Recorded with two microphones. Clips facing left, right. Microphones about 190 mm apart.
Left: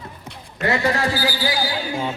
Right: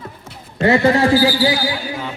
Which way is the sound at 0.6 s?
25° right (ahead or behind).